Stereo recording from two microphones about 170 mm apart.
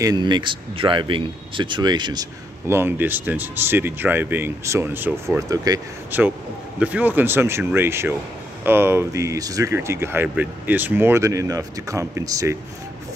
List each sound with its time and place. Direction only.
0.0 s speech: 25° right (ahead or behind)
2.6 s speech: 15° right (ahead or behind)